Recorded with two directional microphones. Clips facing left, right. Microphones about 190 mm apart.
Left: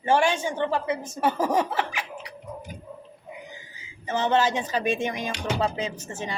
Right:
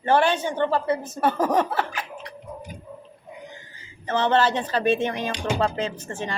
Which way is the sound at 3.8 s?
10° left (ahead or behind).